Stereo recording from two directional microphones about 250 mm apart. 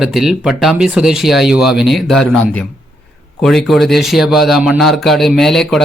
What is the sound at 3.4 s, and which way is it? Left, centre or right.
Speech, centre.